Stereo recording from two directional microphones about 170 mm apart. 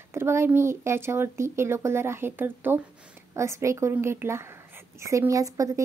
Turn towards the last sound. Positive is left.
turn(degrees=-20)  # may be behind; listen again after turning